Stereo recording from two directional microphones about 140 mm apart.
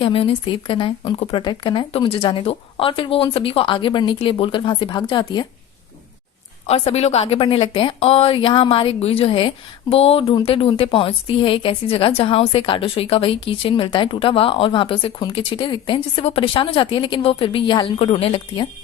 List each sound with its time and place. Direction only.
0.0 s speech: 40° left (ahead or behind)
6.7 s a woman's voice: 45° left (ahead or behind)